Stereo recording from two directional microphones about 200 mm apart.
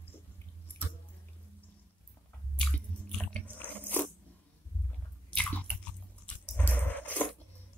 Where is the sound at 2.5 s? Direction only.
5° left (ahead or behind).